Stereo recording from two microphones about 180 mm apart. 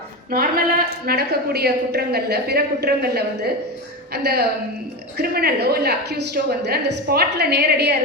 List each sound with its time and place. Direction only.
0.3 s a woman's voice: 55° right (ahead or behind)